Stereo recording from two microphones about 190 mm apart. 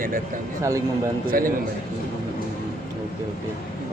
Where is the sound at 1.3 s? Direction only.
50° right (ahead or behind).